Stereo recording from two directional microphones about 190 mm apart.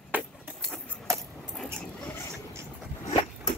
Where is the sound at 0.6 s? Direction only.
5° left (ahead or behind).